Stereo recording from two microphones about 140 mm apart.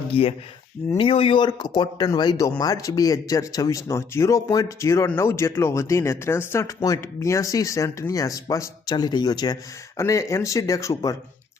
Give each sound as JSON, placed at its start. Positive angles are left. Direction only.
{"t": 0.1, "sound": "speech", "side_deg": 45}